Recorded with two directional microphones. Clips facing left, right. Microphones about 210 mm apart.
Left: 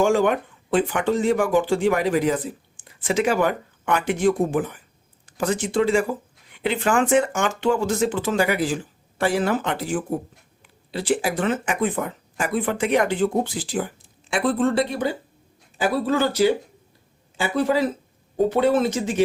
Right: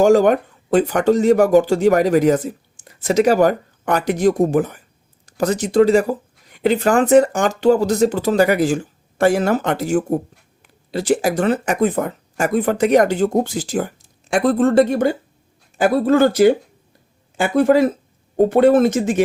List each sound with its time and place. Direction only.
0.0 s speech: 40° right (ahead or behind)